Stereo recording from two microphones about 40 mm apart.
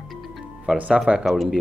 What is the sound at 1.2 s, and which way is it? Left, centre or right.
Speech, centre.